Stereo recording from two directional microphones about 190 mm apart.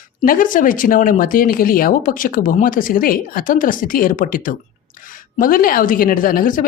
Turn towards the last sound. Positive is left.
turn(degrees=45)  # may be behind; listen again after turning